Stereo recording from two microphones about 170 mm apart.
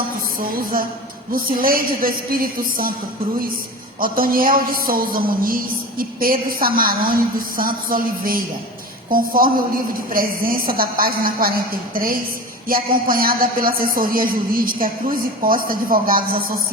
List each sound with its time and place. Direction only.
0.3 s speech: 55° right (ahead or behind)
4.0 s speech: 55° right (ahead or behind)